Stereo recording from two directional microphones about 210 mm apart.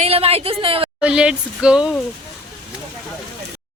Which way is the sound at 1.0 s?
5° right (ahead or behind).